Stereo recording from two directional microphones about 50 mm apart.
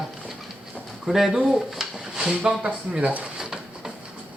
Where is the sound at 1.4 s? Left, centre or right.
Centre.